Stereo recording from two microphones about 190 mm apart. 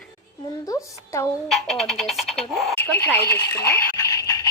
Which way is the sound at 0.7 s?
15° left (ahead or behind).